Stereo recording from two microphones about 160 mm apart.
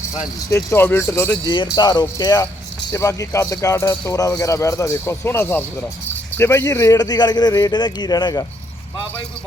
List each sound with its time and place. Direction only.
0.3 s speech: 20° left (ahead or behind)